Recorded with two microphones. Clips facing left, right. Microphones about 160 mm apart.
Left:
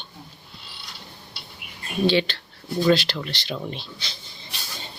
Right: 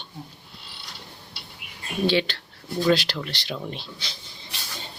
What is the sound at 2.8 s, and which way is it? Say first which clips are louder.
A woman's voice: left 2 dB; 5° right (ahead or behind).